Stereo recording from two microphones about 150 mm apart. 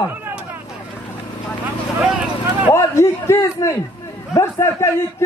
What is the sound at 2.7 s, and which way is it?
A man's voice, 20° left (ahead or behind).